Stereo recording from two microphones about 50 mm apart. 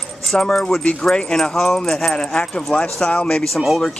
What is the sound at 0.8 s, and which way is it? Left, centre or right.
Speech, left.